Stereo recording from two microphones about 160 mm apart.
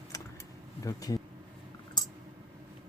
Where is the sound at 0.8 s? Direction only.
20° left (ahead or behind).